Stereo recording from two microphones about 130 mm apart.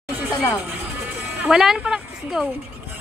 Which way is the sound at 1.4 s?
5° right (ahead or behind).